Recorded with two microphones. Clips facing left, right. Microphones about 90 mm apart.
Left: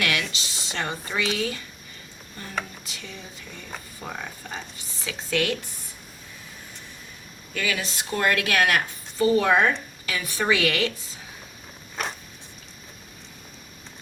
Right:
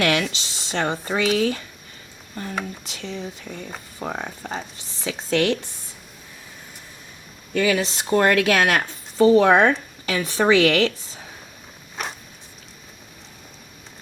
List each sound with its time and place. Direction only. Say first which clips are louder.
0.0 s speech: right 6 dB; 35° right (ahead or behind)
4.0 s speech: right 7 dB; 35° right (ahead or behind)
7.5 s speech: right 8 dB; 35° right (ahead or behind)
12.0 s a sound: even; centre (ahead or behind)